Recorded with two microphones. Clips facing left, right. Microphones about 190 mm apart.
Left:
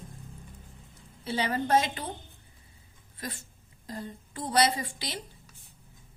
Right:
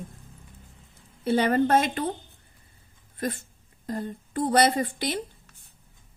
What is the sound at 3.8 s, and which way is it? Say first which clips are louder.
Speech: right 7 dB; 55° right (ahead or behind).